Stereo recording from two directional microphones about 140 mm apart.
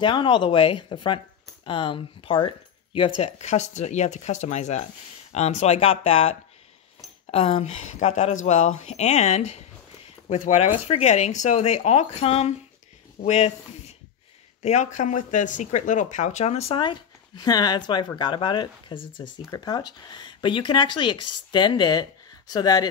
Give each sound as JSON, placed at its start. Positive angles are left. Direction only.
{"t": 0.0, "sound": "speech", "side_deg": 35}